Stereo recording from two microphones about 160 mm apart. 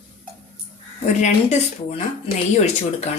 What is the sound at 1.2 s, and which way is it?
Speech, 45° left (ahead or behind).